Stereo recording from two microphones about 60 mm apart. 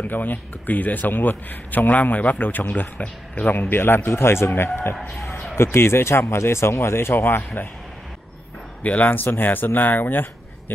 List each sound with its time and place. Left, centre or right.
0.0 s speech: left
8.8 s speech: left